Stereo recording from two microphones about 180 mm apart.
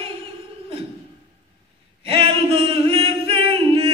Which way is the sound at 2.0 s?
30° right (ahead or behind).